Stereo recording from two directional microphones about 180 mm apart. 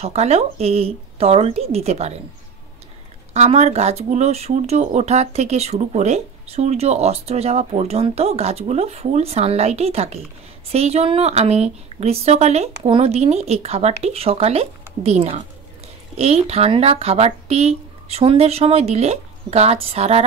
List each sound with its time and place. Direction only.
0.0 s speech: 35° right (ahead or behind)
3.3 s speech: 35° right (ahead or behind)